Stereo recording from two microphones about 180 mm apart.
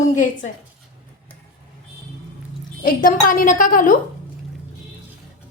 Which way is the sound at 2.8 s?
50° left (ahead or behind).